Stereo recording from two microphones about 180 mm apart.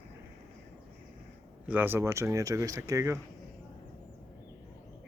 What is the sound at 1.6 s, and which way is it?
Speech, 10° right (ahead or behind).